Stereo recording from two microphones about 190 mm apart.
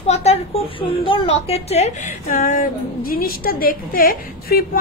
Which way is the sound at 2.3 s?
45° left (ahead or behind).